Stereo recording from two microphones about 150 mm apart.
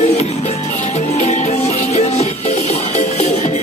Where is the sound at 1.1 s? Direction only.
50° left (ahead or behind).